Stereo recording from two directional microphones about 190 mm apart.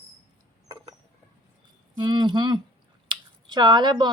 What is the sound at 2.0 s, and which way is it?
Speech, 25° right (ahead or behind).